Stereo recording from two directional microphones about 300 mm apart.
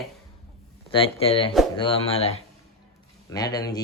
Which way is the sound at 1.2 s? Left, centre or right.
Centre.